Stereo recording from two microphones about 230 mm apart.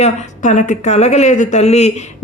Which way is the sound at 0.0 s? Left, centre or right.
Left.